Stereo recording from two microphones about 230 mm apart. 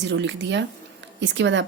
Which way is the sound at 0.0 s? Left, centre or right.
Right.